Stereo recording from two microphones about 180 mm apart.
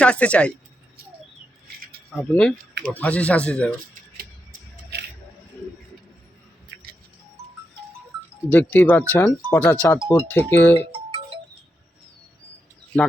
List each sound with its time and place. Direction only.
0.0 s speech: 5° left (ahead or behind)
2.1 s speech: 5° left (ahead or behind)
8.4 s speech: 10° left (ahead or behind)
10.8 s music: 30° right (ahead or behind)